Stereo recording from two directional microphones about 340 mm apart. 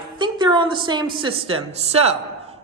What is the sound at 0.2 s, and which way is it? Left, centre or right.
A woman's voice, centre.